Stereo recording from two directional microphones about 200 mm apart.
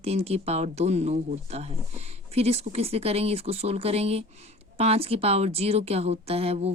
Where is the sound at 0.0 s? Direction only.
30° right (ahead or behind).